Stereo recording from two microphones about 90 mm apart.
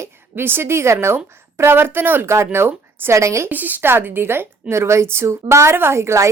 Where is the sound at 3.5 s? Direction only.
20° right (ahead or behind).